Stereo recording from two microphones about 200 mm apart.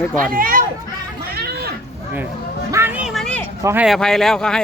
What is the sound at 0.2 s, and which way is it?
Speech, 45° right (ahead or behind).